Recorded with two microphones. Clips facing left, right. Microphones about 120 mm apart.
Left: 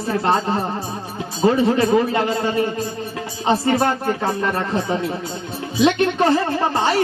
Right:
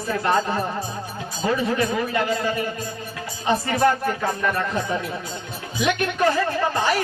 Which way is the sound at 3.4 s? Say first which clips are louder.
Left 2 dB; 30° left (ahead or behind).